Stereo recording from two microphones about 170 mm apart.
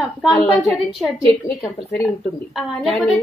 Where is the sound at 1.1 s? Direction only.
20° left (ahead or behind).